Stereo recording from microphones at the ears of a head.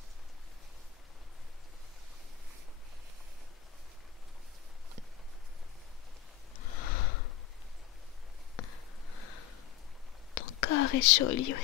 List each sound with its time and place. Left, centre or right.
6.5 s sniff: left
8.5 s a sound: left
10.3 s speech: left